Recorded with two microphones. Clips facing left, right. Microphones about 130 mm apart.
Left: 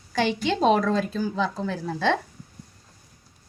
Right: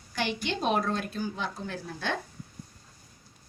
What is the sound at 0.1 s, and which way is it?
A woman's voice, 90° left.